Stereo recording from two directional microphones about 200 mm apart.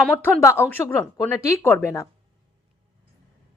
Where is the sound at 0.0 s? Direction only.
5° left (ahead or behind).